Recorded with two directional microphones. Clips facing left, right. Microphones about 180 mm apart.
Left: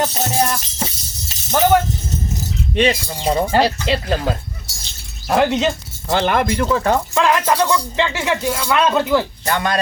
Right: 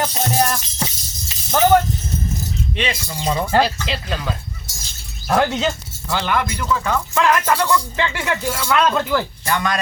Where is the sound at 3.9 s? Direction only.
50° left (ahead or behind).